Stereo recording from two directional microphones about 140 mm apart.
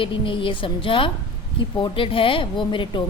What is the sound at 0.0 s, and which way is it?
Speech, 35° left (ahead or behind).